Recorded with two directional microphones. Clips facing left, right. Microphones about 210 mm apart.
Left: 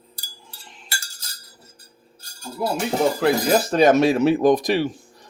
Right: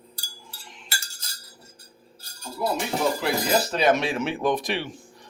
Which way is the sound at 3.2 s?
50° left (ahead or behind).